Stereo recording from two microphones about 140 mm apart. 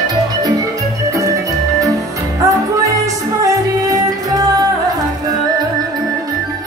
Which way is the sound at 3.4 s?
25° right (ahead or behind).